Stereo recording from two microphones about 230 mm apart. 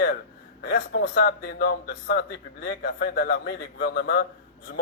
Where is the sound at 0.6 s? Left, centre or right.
Left.